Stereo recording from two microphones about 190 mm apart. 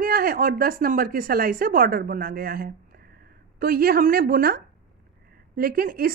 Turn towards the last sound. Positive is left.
turn(degrees=-50)  # may be behind; listen again after turning